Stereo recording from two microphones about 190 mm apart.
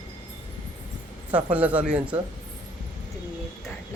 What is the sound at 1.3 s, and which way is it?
Speech, 5° right (ahead or behind).